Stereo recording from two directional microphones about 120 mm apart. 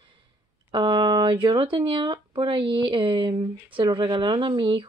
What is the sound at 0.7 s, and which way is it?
Speech, 40° right (ahead or behind).